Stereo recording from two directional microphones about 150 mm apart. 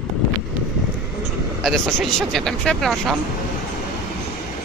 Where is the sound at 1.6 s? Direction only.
5° left (ahead or behind).